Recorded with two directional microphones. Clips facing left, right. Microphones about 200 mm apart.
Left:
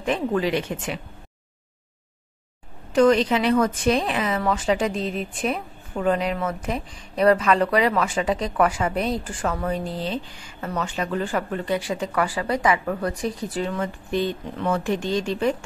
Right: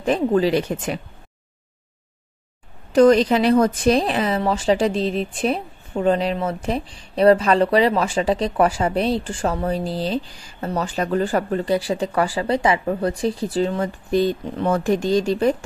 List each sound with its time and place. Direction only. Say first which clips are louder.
0.0 s speech: right 5 dB; 35° right (ahead or behind)
2.9 s speech: right 4 dB; 40° right (ahead or behind)